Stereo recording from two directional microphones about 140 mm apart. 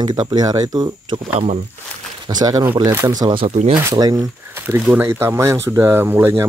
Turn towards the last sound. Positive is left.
turn(degrees=-15)  # may be behind; listen again after turning